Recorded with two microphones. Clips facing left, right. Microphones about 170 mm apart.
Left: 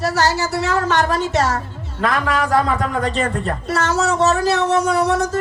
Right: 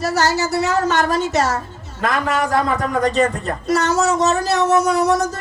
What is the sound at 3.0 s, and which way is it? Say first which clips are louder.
A man's voice: right 3 dB; 40° right (ahead or behind).